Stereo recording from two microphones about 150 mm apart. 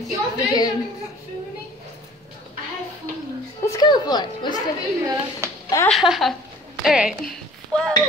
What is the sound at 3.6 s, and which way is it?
Speech, 25° left (ahead or behind).